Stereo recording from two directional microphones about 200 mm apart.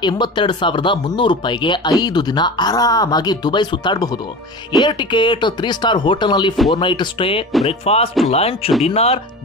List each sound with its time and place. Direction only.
0.0 s speech: 20° left (ahead or behind)